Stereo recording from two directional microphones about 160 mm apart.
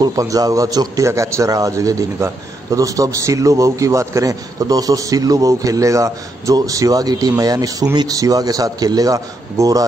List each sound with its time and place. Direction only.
0.0 s a man's voice: 20° right (ahead or behind)